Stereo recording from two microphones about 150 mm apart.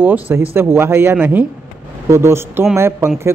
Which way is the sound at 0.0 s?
15° right (ahead or behind).